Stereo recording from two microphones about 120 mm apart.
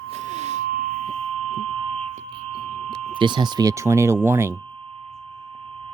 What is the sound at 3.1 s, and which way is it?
Speech, 40° right (ahead or behind).